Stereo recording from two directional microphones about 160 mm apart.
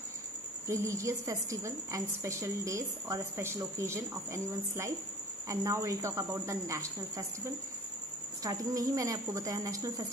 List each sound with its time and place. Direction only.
0.7 s a woman's voice: 20° right (ahead or behind)